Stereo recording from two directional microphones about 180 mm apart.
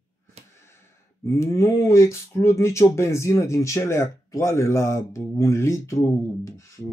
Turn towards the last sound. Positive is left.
turn(degrees=15)  # may be behind; listen again after turning